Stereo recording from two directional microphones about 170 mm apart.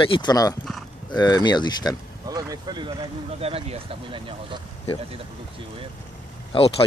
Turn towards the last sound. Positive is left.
turn(degrees=35)  # may be behind; listen again after turning